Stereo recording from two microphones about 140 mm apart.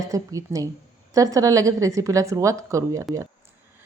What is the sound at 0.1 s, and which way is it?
A woman's voice, 25° right (ahead or behind).